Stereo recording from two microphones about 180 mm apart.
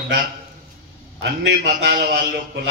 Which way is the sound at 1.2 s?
70° right (ahead or behind).